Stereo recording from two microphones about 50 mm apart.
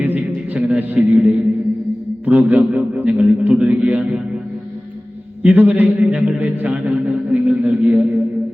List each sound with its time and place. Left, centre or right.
0.0 s a sound: right
2.2 s a man's voice: right
5.5 s a man's voice: right
6.1 s a man's voice: right